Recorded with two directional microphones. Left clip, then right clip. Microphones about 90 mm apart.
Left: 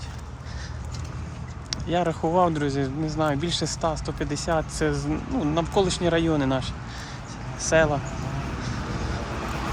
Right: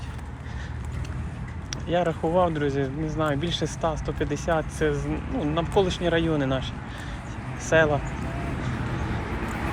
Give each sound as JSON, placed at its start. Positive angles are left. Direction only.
{"t": 1.7, "sound": "speech", "side_deg": 60}
{"t": 7.6, "sound": "speech", "side_deg": 50}